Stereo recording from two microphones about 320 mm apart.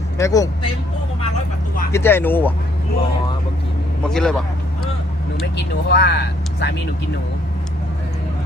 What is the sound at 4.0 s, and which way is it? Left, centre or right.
Speech, centre.